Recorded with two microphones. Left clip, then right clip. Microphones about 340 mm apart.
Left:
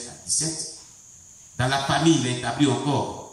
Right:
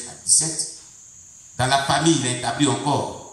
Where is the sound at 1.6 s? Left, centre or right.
Centre.